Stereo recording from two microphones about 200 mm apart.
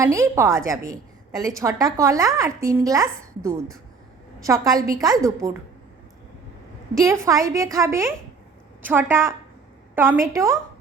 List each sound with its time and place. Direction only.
0.0 s speech: 15° right (ahead or behind)
6.9 s speech: 15° right (ahead or behind)